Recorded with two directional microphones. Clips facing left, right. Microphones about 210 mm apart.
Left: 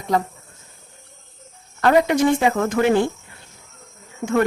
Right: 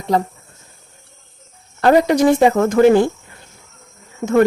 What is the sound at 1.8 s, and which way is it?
Speech, 35° right (ahead or behind).